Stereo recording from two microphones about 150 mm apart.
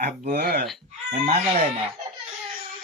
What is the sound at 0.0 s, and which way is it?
Speech, 75° right (ahead or behind).